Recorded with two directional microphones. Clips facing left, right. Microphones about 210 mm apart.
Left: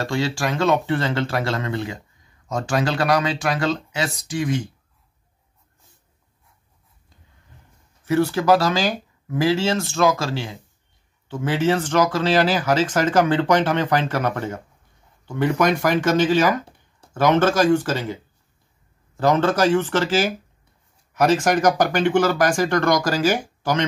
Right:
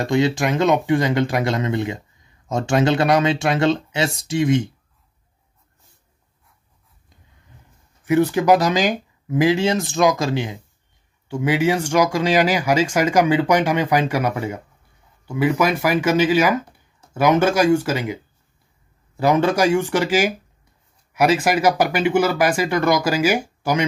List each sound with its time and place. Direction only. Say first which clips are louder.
0.0 s speech: right 5 dB; 20° right (ahead or behind)
8.0 s speech: right 3 dB; 15° right (ahead or behind)